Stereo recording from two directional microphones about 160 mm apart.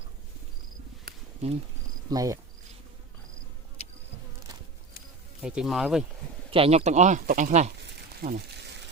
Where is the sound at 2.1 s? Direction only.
20° right (ahead or behind).